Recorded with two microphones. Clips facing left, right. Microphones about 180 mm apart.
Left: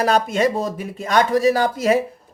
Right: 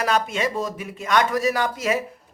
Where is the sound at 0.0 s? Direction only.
35° left (ahead or behind).